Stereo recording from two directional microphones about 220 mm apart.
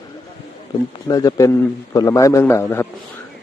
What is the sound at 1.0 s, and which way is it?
Speech, 15° left (ahead or behind).